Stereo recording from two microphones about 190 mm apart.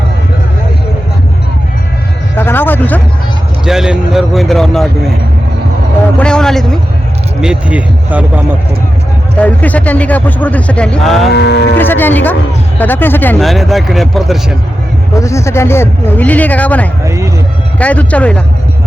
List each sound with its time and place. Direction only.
2.3 s a sound: 10° left (ahead or behind)
3.7 s speech: centre (ahead or behind)
6.1 s speech: 5° left (ahead or behind)
9.4 s speech: 10° left (ahead or behind)
11.3 s moo: 60° left (ahead or behind)
11.8 s speech: 10° left (ahead or behind)
15.1 s speech: 15° left (ahead or behind)
17.1 s speech: 15° right (ahead or behind)
17.7 s speech: 5° left (ahead or behind)